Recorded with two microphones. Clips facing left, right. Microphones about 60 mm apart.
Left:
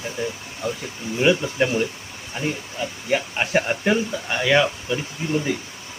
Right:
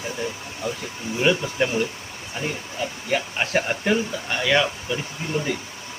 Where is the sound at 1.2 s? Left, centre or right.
Centre.